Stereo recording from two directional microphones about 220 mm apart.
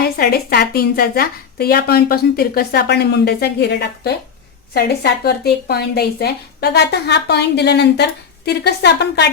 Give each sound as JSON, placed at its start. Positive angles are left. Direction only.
{"t": 0.0, "sound": "a woman's voice", "side_deg": 45}